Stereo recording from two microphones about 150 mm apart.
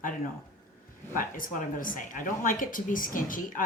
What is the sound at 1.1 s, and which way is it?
Speech, 65° left (ahead or behind).